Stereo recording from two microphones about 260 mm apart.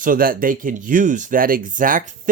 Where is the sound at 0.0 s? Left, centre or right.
Right.